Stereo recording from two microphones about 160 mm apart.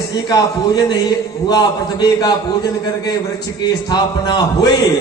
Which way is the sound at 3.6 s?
25° left (ahead or behind).